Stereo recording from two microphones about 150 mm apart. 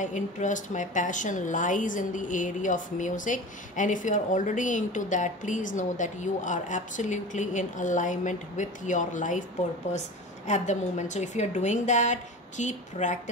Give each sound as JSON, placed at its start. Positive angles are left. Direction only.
{"t": 0.0, "sound": "a woman's voice", "side_deg": 55}